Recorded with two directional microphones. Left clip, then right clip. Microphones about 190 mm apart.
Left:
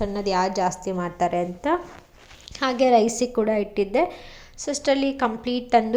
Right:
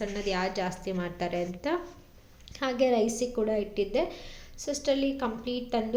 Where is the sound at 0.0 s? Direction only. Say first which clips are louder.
Left 7 dB; 30° left (ahead or behind).